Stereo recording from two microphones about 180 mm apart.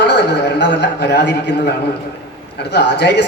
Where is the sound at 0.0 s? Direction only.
70° left (ahead or behind).